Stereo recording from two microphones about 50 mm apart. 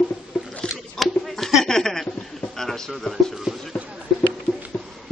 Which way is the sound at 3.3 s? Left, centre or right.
Centre.